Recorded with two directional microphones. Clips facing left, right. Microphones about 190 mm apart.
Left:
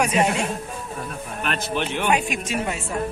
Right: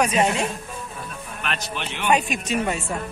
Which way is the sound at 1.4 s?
50° left (ahead or behind).